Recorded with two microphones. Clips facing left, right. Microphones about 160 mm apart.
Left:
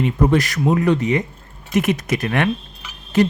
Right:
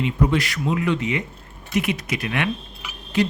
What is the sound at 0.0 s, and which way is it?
Speech, 50° left (ahead or behind).